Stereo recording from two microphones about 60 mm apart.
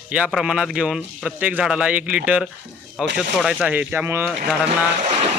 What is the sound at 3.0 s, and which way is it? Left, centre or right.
Speech, centre.